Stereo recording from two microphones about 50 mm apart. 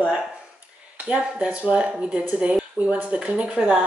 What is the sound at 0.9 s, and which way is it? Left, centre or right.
Speech, right.